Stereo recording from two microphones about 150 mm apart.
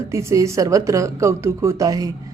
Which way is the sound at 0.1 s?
20° right (ahead or behind).